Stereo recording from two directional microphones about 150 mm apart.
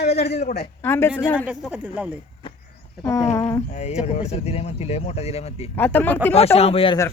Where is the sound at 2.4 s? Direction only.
30° left (ahead or behind).